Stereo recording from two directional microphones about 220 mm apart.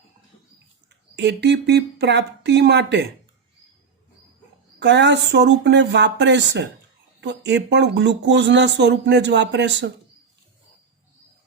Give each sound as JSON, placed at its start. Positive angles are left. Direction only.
{"t": 1.1, "sound": "speech", "side_deg": -50}
{"t": 4.8, "sound": "speech", "side_deg": -50}